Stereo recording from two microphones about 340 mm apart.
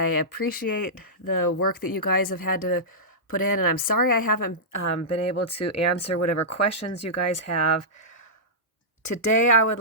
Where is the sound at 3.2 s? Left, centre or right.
Left.